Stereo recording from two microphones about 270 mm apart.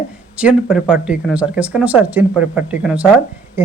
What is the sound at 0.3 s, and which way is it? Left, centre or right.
Speech, centre.